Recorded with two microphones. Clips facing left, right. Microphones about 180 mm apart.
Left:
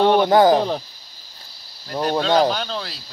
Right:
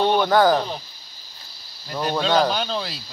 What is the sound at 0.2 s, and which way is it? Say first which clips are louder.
Speech: left 3 dB; 20° left (ahead or behind).